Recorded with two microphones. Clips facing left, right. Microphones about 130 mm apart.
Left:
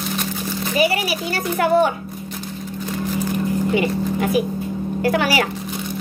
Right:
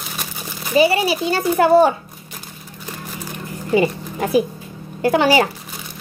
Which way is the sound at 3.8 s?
30° right (ahead or behind).